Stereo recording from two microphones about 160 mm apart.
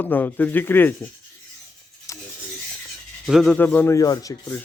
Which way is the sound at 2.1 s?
20° left (ahead or behind).